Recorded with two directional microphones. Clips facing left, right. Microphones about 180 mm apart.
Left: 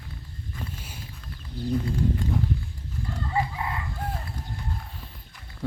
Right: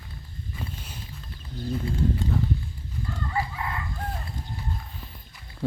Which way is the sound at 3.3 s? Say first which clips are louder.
Left 3 dB; 20° left (ahead or behind).